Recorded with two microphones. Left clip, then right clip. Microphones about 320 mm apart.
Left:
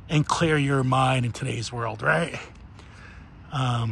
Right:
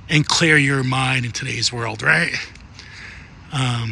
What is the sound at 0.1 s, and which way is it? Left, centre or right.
Speech, centre.